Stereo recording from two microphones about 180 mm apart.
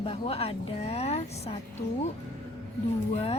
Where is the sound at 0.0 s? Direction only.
30° left (ahead or behind).